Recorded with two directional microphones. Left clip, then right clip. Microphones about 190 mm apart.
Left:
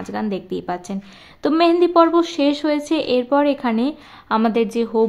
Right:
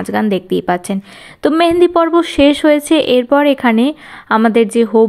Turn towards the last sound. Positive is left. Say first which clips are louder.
# right 8 dB
turn(degrees=-20)  # may be behind; listen again after turning